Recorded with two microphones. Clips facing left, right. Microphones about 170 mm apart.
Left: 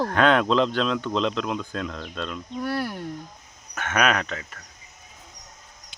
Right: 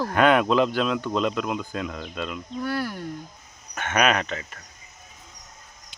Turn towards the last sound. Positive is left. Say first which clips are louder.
# right 1 dB
turn(degrees=0)  # may be behind; listen again after turning